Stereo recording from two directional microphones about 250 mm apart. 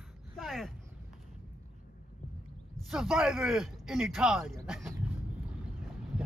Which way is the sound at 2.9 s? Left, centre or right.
Centre.